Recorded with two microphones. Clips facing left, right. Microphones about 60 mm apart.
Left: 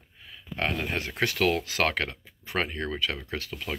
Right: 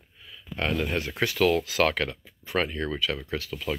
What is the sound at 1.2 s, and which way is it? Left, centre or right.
Speech, left.